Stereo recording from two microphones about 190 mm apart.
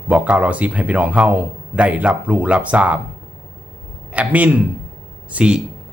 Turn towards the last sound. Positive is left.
turn(degrees=-5)  # may be behind; listen again after turning